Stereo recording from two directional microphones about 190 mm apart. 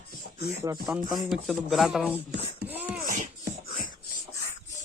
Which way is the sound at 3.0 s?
45° right (ahead or behind).